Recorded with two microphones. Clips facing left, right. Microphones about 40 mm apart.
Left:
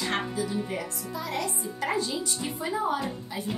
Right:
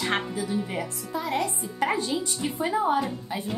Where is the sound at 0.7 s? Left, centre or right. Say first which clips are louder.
Right 1 dB; right.